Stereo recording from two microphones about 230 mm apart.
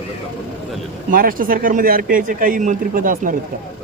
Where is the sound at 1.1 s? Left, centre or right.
Right.